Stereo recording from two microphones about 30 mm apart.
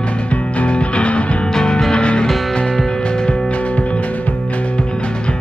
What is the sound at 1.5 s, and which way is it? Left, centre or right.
Music, left.